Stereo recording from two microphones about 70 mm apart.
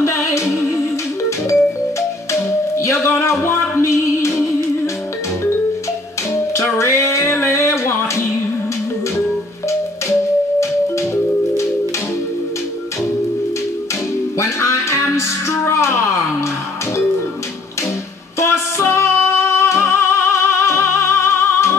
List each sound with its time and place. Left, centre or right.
0.0 s music: left
2.7 s music: left
6.3 s music: left
14.4 s music: left
18.4 s music: left